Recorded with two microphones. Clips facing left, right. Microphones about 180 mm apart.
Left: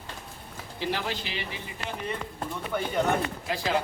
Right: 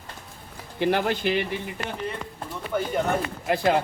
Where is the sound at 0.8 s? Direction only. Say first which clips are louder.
Right 8 dB; 55° right (ahead or behind).